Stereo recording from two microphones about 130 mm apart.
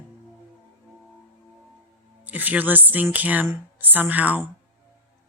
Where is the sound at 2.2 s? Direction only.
15° right (ahead or behind).